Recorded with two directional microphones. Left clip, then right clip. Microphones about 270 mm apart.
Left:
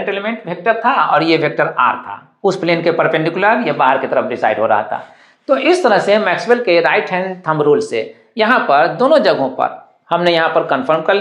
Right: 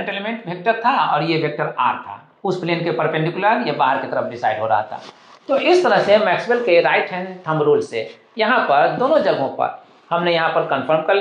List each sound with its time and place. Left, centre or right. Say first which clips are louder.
0.0 s speech: left 5 dB; left